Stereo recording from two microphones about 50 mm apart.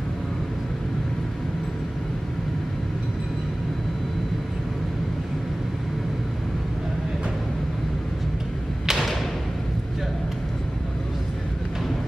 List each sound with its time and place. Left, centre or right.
8.8 s thump: centre